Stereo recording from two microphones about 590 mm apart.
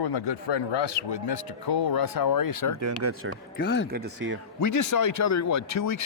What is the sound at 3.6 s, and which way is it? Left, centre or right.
Speech, centre.